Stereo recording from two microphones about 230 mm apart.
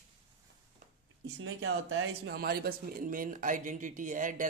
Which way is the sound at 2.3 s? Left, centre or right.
Right.